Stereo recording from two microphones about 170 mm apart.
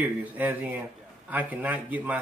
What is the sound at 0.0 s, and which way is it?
Speech, 10° right (ahead or behind).